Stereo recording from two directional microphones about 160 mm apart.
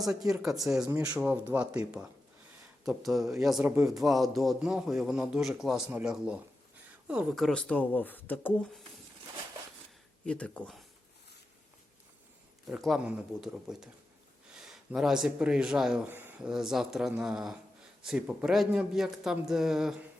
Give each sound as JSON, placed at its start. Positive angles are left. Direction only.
{"t": 0.3, "sound": "speech", "side_deg": 0}
{"t": 0.9, "sound": "speech", "side_deg": -20}
{"t": 1.1, "sound": "speech", "side_deg": -10}
{"t": 2.8, "sound": "speech", "side_deg": 0}
{"t": 10.2, "sound": "speech", "side_deg": 5}
{"t": 12.6, "sound": "speech", "side_deg": 0}